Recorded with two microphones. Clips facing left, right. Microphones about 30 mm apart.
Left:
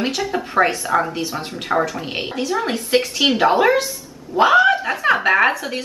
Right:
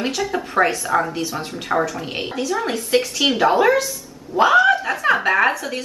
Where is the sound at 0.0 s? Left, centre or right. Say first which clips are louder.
Left 1 dB; centre.